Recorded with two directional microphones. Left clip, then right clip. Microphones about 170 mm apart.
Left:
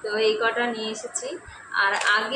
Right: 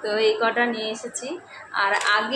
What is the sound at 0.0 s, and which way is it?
A woman's voice, 40° right (ahead or behind).